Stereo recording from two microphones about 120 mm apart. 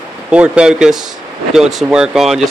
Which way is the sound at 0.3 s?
10° right (ahead or behind).